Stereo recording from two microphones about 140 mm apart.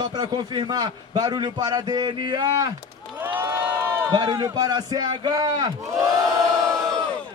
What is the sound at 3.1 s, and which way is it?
Crowd, 15° right (ahead or behind).